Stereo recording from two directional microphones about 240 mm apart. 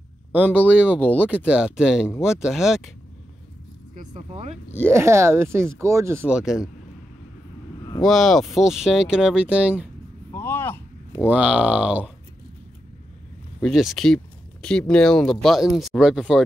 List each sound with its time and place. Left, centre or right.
0.3 s speech: centre
0.6 s speech: centre
1.3 s speech: centre
3.9 s speech: right
4.7 s speech: centre
8.0 s speech: centre
10.3 s a sound: centre
11.2 s speech: centre
13.6 s speech: centre